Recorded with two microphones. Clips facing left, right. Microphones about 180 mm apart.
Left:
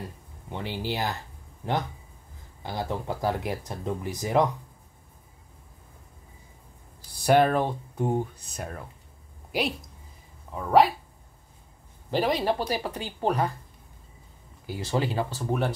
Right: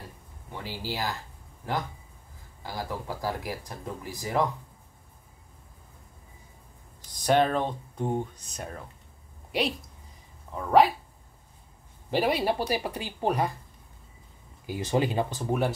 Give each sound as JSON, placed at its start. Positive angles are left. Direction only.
{"t": 0.5, "sound": "speech", "side_deg": 20}
{"t": 2.6, "sound": "speech", "side_deg": 20}
{"t": 7.1, "sound": "a woman's voice", "side_deg": 10}
{"t": 12.1, "sound": "speech", "side_deg": -10}
{"t": 14.7, "sound": "speech", "side_deg": -15}